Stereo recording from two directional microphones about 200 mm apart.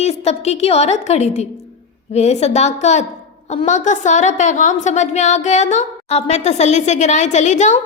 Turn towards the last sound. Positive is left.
turn(degrees=35)  # may be behind; listen again after turning